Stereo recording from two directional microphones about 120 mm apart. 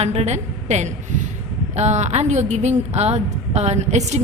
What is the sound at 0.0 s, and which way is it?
A woman's voice, 60° right (ahead or behind).